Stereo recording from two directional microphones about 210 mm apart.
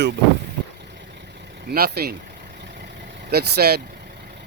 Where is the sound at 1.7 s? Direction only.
45° right (ahead or behind).